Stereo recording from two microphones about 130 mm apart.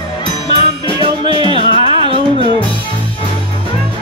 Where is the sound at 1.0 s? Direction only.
40° right (ahead or behind).